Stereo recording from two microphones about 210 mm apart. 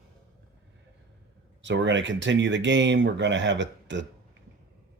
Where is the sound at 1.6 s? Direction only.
60° right (ahead or behind).